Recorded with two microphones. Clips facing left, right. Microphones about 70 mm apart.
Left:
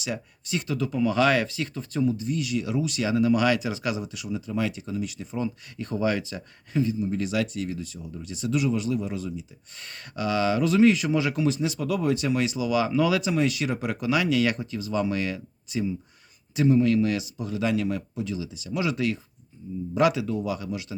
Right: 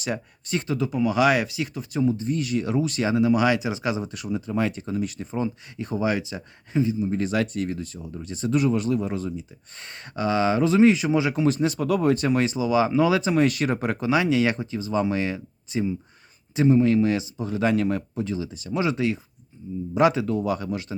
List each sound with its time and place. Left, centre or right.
0.0 s speech: right
0.7 s speech: centre
2.0 s speech: right
3.2 s speech: right
4.1 s speech: right
5.7 s speech: centre
7.2 s speech: right
9.7 s speech: right
11.4 s speech: right
13.3 s speech: right
18.8 s speech: right
20.1 s speech: right